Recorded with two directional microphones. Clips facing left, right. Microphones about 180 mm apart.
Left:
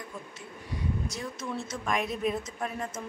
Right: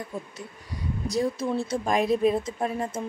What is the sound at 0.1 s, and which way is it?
A woman's voice, 35° right (ahead or behind).